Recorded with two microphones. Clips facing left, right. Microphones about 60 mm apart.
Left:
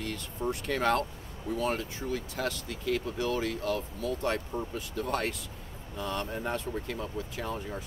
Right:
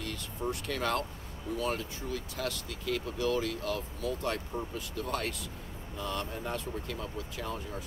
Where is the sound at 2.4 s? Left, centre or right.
Left.